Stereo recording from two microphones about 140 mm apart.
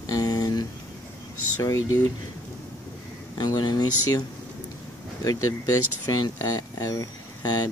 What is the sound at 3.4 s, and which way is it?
Speech, 30° left (ahead or behind).